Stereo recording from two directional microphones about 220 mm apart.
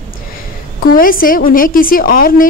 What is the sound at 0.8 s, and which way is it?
A woman's voice, 40° left (ahead or behind).